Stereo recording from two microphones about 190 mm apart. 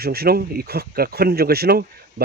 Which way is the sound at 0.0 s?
55° right (ahead or behind).